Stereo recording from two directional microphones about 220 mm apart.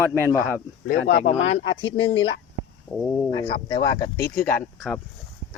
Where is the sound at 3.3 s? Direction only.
20° left (ahead or behind).